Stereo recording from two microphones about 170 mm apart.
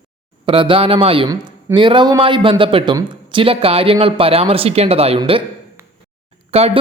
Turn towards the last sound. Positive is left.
turn(degrees=-35)  # may be behind; listen again after turning